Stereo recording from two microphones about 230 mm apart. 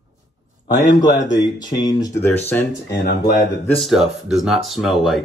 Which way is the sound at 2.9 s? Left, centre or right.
Left.